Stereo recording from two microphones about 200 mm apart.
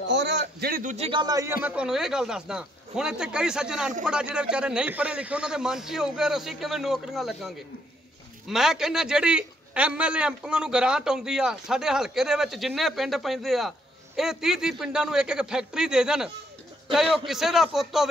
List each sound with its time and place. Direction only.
0.1 s a man's voice: 60° right (ahead or behind)
0.9 s speech: 25° right (ahead or behind)
1.6 s a man's voice: 5° right (ahead or behind)
17.3 s a man's voice: centre (ahead or behind)